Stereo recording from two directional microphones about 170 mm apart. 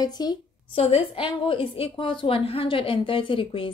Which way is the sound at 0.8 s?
35° left (ahead or behind).